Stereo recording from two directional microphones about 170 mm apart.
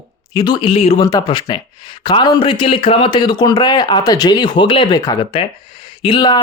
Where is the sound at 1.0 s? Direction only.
20° left (ahead or behind).